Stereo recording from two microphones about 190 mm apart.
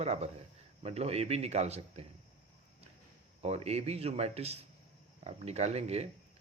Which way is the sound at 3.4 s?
35° right (ahead or behind).